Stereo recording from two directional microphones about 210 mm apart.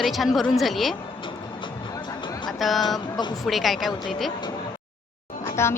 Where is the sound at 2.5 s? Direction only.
Centre (ahead or behind).